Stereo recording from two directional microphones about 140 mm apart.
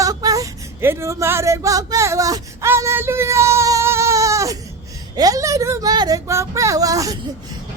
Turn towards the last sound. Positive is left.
turn(degrees=-25)  # may be behind; listen again after turning